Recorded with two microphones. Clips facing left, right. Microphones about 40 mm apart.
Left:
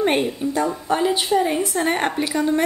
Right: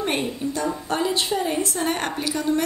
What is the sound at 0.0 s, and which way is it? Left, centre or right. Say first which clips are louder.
A woman's voice: left 5 dB; left.